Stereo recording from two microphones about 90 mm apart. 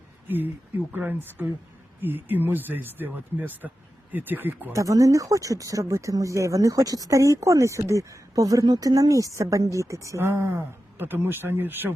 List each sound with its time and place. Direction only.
0.3 s speech: 20° right (ahead or behind)
4.7 s speech: 40° right (ahead or behind)